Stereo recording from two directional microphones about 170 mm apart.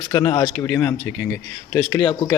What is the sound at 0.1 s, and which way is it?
Speech, 20° left (ahead or behind).